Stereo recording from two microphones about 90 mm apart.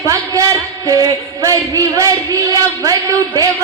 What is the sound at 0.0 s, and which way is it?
A man's voice, 35° right (ahead or behind).